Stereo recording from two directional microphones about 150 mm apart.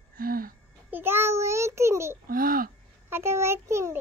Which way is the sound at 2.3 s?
70° right (ahead or behind).